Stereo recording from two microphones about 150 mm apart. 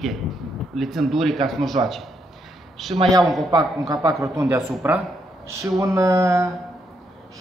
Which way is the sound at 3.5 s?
25° right (ahead or behind).